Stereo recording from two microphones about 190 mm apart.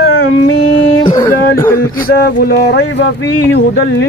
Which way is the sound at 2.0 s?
55° left (ahead or behind).